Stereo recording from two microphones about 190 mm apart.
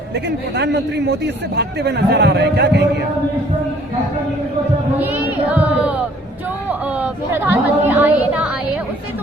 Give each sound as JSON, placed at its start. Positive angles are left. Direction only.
{"t": 0.1, "sound": "a man's voice", "side_deg": -65}
{"t": 4.9, "sound": "a sound", "side_deg": -10}
{"t": 6.7, "sound": "chatter", "side_deg": -10}